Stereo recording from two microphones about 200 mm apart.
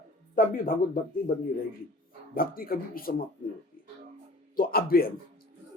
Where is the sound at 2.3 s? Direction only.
45° left (ahead or behind).